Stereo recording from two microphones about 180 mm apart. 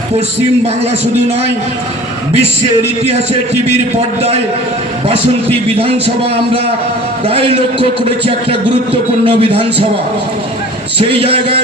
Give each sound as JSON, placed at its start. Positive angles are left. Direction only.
{"t": 2.3, "sound": "a man's voice", "side_deg": -35}
{"t": 5.6, "sound": "a man's voice", "side_deg": -30}
{"t": 7.3, "sound": "a man's voice", "side_deg": -30}
{"t": 10.9, "sound": "a man's voice", "side_deg": -30}